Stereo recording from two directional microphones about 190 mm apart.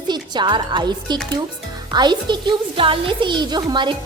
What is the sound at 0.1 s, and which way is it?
A woman's voice, 25° right (ahead or behind).